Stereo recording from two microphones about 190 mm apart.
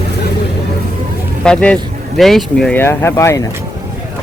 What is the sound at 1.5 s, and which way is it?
Speech, 5° left (ahead or behind).